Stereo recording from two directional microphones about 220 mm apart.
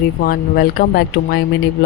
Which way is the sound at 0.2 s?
45° left (ahead or behind).